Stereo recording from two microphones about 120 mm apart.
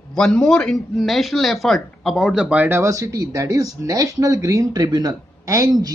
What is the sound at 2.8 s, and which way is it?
Speech, 25° right (ahead or behind).